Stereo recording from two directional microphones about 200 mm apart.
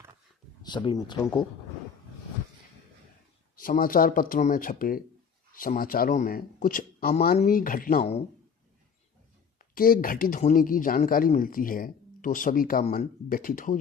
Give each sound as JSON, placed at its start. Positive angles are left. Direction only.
{"t": 0.6, "sound": "speech", "side_deg": 20}
{"t": 3.5, "sound": "speech", "side_deg": 45}
{"t": 9.6, "sound": "speech", "side_deg": 45}